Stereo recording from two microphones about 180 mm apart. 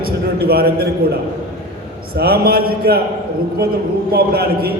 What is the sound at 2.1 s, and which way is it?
Speech, 60° right (ahead or behind).